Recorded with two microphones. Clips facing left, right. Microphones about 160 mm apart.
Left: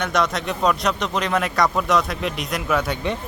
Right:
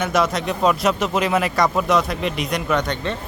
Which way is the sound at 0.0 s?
5° right (ahead or behind).